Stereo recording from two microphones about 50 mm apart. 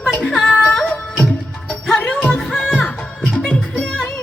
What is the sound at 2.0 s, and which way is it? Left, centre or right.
Music, left.